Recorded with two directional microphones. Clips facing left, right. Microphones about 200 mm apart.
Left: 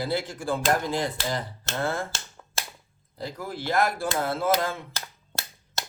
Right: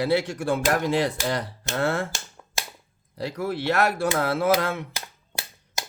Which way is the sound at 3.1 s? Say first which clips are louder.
Right 6 dB; 75° right (ahead or behind).